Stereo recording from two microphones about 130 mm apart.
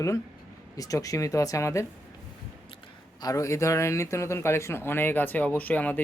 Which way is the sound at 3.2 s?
25° left (ahead or behind).